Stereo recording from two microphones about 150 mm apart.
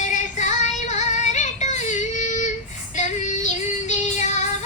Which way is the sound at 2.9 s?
55° left (ahead or behind).